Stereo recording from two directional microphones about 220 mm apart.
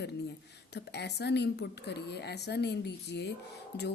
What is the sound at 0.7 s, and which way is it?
Speech, 50° left (ahead or behind).